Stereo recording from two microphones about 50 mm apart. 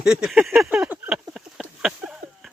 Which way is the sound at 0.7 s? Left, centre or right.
Right.